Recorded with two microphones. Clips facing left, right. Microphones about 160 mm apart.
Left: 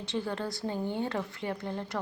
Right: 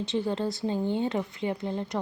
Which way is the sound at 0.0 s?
20° right (ahead or behind).